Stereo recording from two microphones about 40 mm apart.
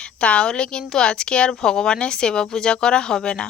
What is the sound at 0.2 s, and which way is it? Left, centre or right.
A woman's voice, left.